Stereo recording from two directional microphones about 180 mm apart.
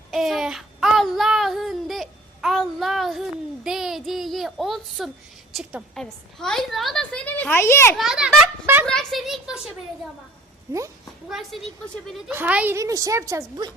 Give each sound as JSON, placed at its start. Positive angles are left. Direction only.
{"t": 0.1, "sound": "child singing", "side_deg": 0}
{"t": 5.5, "sound": "a woman's voice", "side_deg": 0}
{"t": 7.9, "sound": "a woman's voice", "side_deg": -5}
{"t": 8.9, "sound": "a woman's voice", "side_deg": 5}
{"t": 10.7, "sound": "a woman's voice", "side_deg": -15}
{"t": 12.3, "sound": "a woman's voice", "side_deg": -10}